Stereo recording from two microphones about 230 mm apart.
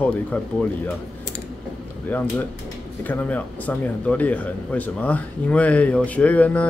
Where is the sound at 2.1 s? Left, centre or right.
Centre.